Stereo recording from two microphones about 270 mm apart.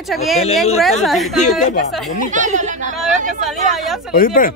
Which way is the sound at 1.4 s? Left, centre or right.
Left.